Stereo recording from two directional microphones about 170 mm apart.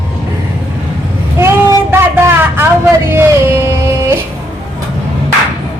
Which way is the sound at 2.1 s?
15° right (ahead or behind).